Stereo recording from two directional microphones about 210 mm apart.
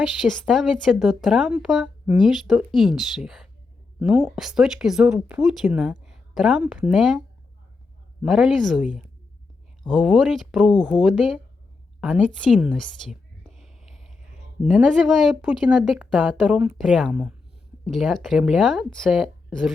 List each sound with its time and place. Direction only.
0.2 s speech: centre (ahead or behind)
8.2 s speech: 5° right (ahead or behind)
11.9 s a sound: centre (ahead or behind)
14.6 s speech: centre (ahead or behind)